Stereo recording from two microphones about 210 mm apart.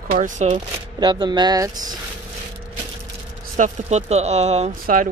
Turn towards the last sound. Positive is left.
turn(degrees=-35)  # may be behind; listen again after turning